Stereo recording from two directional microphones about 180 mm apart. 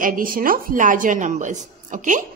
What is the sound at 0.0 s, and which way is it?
A woman's voice, 50° right (ahead or behind).